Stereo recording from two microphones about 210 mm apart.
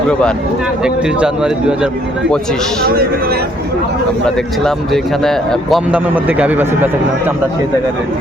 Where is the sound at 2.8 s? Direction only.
45° right (ahead or behind).